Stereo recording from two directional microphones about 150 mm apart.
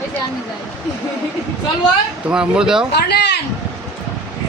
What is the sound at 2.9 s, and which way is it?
Speech, 90° left.